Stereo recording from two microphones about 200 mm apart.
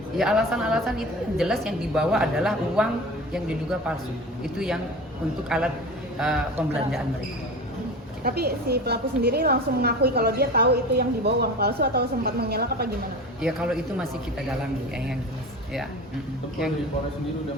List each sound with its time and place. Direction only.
0.2 s a woman's voice: centre (ahead or behind)
8.2 s a woman's voice: 50° right (ahead or behind)
13.4 s a woman's voice: centre (ahead or behind)